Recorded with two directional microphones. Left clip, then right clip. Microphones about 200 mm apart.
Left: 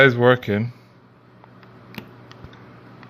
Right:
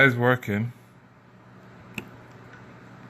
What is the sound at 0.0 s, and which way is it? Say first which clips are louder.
Speech: left 5 dB; 25° left (ahead or behind).